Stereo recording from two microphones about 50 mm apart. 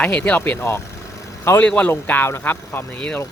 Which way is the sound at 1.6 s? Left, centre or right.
Left.